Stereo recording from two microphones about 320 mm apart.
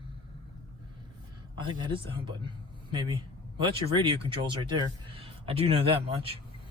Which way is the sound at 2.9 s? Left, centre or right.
Centre.